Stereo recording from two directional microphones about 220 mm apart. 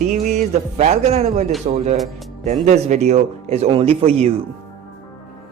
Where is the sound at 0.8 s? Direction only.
30° right (ahead or behind).